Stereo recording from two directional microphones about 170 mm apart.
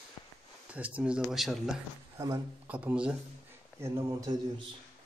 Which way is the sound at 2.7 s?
10° right (ahead or behind).